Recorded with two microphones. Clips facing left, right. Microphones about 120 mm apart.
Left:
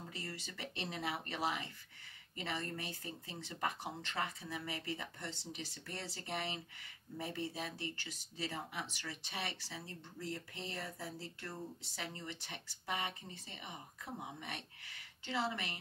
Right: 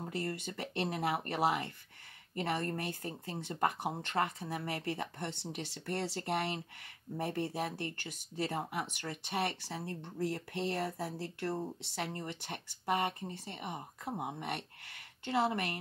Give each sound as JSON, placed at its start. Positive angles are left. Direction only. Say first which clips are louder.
{"t": 0.0, "sound": "speech", "louder": "right 9 dB", "side_deg": -55}
{"t": 10.2, "sound": "speech", "louder": "right 10 dB", "side_deg": -65}